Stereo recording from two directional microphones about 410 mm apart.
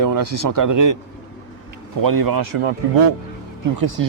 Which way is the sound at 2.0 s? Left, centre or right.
Right.